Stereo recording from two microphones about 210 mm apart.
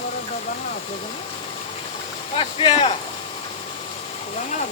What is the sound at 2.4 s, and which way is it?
Speech, 25° left (ahead or behind).